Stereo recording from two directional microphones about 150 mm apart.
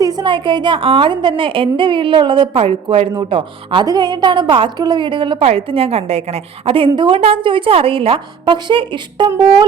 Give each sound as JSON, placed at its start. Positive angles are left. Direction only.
{"t": 0.0, "sound": "a woman's voice", "side_deg": -25}
{"t": 9.3, "sound": "music", "side_deg": -25}